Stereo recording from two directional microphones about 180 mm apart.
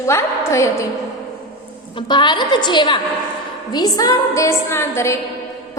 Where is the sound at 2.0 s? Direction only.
25° left (ahead or behind).